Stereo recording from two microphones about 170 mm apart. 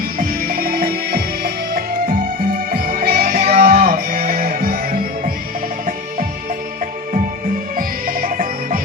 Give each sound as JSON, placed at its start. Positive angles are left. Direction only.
{"t": 0.2, "sound": "music", "side_deg": -60}
{"t": 3.9, "sound": "music", "side_deg": -60}
{"t": 7.8, "sound": "music", "side_deg": -55}